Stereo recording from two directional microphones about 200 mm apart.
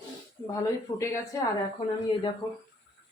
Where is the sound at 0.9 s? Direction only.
15° left (ahead or behind).